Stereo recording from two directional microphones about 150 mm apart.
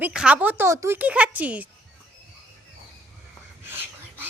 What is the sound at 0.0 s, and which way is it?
Speech, 5° right (ahead or behind).